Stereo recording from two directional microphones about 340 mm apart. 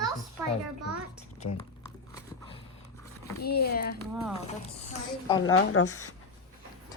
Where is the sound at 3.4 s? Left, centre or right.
Left.